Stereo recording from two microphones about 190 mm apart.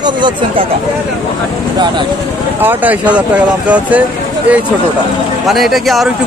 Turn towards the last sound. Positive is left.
turn(degrees=0)  # may be behind; listen again after turning